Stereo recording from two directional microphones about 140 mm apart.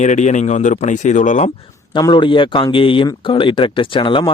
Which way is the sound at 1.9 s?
35° left (ahead or behind).